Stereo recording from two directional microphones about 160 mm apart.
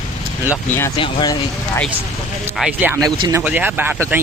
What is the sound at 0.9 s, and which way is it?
Speech, 30° left (ahead or behind).